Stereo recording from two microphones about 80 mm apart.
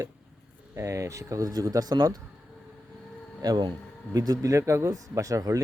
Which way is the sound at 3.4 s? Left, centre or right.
Right.